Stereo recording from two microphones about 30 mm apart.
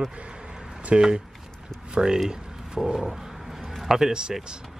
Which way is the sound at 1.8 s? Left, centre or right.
Right.